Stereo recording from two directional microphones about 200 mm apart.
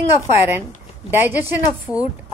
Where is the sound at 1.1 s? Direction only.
10° right (ahead or behind).